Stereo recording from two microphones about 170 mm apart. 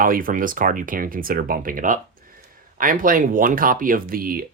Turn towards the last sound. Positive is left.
turn(degrees=-60)  # may be behind; listen again after turning